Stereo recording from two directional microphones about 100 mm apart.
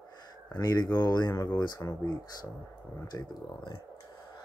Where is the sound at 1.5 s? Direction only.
40° left (ahead or behind).